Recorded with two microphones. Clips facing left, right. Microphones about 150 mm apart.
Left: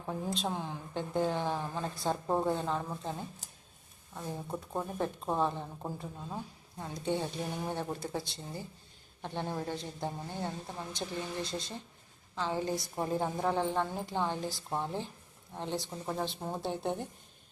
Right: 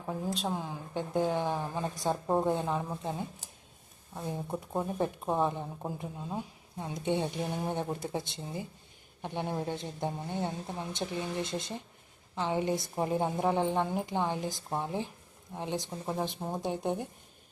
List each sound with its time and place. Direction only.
0.0 s speech: 5° right (ahead or behind)